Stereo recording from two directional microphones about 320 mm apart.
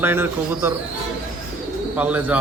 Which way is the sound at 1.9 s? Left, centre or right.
Centre.